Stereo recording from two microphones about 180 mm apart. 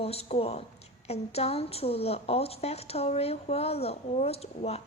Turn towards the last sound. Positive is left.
turn(degrees=35)  # may be behind; listen again after turning